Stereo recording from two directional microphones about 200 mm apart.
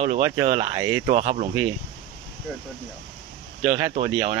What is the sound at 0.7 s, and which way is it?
Speech, 15° right (ahead or behind).